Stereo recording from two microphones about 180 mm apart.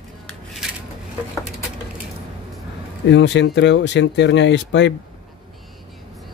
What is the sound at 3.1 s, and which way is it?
Speech, 75° left (ahead or behind).